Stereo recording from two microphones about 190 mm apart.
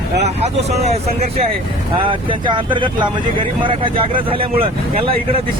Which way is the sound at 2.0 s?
25° right (ahead or behind).